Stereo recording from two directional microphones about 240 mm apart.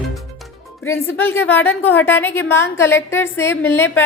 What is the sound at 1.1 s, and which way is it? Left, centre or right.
A woman's voice, centre.